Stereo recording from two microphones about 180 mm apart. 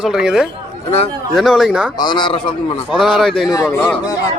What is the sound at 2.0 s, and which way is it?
Speech, 25° left (ahead or behind).